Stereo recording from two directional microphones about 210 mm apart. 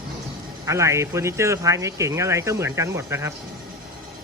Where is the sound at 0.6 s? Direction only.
15° right (ahead or behind).